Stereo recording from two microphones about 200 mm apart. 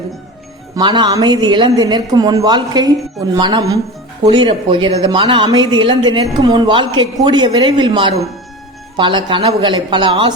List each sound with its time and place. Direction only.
0.8 s a woman's voice: 20° right (ahead or behind)